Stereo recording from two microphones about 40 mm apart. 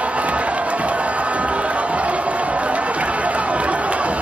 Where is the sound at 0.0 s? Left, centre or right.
Right.